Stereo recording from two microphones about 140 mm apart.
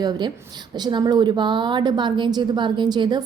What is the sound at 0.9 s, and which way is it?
A woman's voice, 30° right (ahead or behind).